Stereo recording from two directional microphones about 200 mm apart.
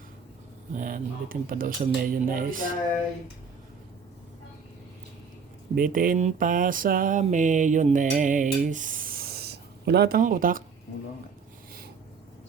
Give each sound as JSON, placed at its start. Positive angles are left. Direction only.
{"t": 0.7, "sound": "mantra", "side_deg": -40}
{"t": 5.7, "sound": "mantra", "side_deg": -45}